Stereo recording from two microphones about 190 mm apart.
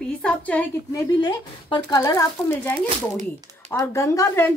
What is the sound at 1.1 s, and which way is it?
Speech, 20° left (ahead or behind).